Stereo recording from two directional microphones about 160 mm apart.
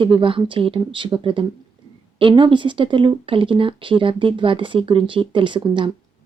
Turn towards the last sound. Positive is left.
turn(degrees=-30)  # may be behind; listen again after turning